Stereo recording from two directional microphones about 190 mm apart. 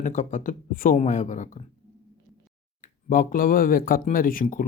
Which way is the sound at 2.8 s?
45° left (ahead or behind).